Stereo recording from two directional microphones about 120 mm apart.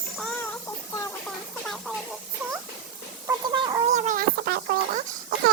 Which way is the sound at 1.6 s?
Centre (ahead or behind).